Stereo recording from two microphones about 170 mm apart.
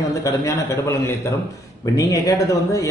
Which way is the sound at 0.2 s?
20° left (ahead or behind).